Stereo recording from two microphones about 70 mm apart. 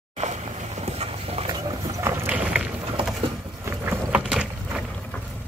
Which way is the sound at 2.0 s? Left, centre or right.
Right.